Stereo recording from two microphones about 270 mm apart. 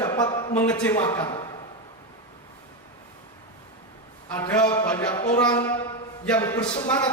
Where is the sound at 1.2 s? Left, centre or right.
Centre.